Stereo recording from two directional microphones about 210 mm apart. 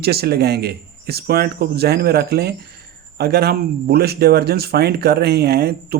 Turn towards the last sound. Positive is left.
turn(degrees=-50)  # may be behind; listen again after turning